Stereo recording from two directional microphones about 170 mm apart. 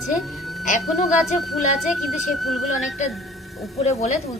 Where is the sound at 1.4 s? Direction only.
Centre (ahead or behind).